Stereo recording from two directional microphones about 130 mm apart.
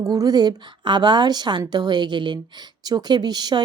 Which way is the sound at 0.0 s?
30° right (ahead or behind).